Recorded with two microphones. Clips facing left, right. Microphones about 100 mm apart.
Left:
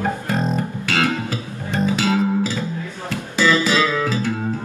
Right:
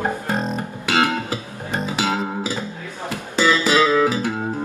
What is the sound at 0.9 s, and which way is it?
Music, 20° right (ahead or behind).